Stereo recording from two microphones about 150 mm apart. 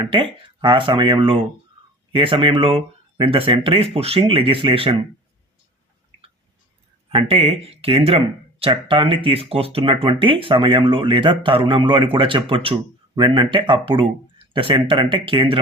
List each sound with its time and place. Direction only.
0.0 s speech: 35° right (ahead or behind)
7.1 s speech: 40° right (ahead or behind)